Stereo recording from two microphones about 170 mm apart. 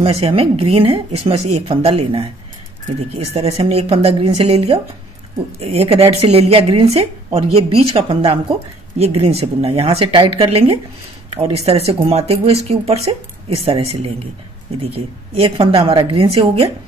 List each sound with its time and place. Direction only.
0.0 s a woman's voice: 35° right (ahead or behind)